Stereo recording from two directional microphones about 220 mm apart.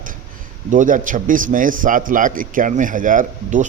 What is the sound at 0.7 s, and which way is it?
A man's voice, 35° right (ahead or behind).